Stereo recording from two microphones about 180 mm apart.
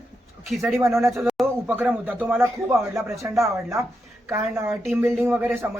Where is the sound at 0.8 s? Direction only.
15° right (ahead or behind).